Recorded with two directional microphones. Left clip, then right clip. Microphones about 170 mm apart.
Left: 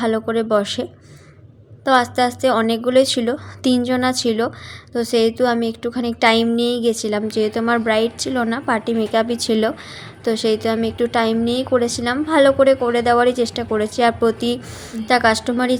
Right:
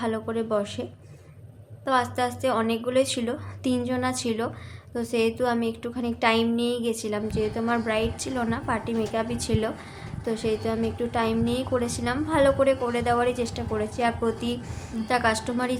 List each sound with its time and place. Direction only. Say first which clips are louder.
0.0 s a woman's voice: left 9 dB; 35° left (ahead or behind)